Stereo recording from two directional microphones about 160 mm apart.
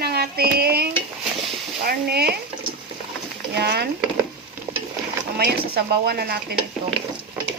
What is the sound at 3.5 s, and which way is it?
Speech, 85° right.